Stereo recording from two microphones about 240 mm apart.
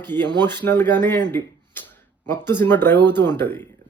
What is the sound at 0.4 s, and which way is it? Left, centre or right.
Speech, centre.